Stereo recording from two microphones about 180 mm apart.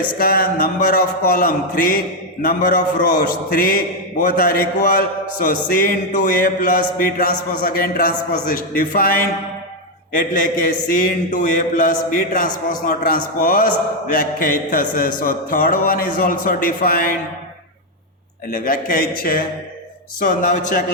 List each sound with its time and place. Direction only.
0.2 s a man's voice: 55° left (ahead or behind)
18.5 s a man's voice: 50° left (ahead or behind)